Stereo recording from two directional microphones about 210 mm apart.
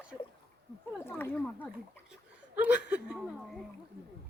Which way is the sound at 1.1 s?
5° left (ahead or behind).